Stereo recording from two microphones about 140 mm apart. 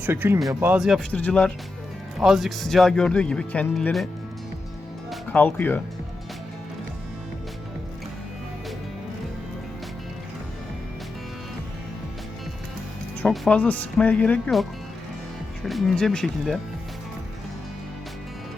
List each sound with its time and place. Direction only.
0.0 s speech: 15° right (ahead or behind)
0.8 s speech: centre (ahead or behind)
5.3 s speech: 10° left (ahead or behind)
13.2 s speech: 5° left (ahead or behind)